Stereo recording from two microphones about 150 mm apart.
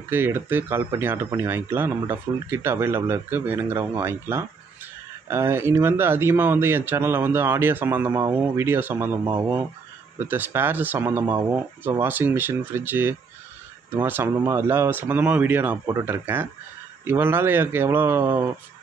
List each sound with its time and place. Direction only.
0.1 s a man's voice: 15° right (ahead or behind)
9.2 s speech: 25° right (ahead or behind)
10.1 s a man's voice: 15° right (ahead or behind)